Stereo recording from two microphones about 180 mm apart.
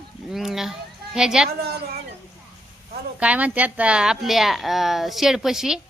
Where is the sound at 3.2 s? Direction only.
5° right (ahead or behind).